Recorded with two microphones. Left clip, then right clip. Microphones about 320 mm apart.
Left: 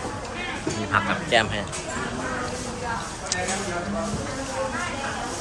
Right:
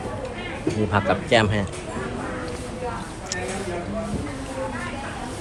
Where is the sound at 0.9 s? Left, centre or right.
Centre.